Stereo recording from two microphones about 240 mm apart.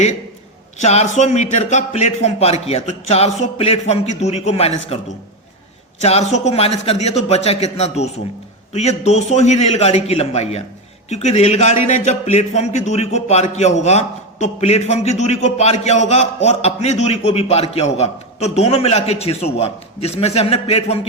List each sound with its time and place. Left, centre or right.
0.8 s speech: left